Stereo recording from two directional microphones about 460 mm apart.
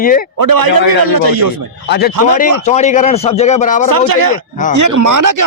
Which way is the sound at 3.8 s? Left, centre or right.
Right.